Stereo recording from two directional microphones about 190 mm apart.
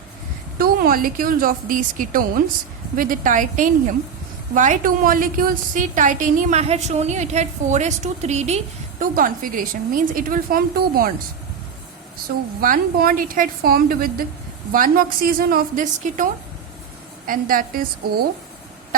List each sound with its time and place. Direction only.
0.6 s a woman's voice: 50° right (ahead or behind)
12.1 s a woman's voice: 50° right (ahead or behind)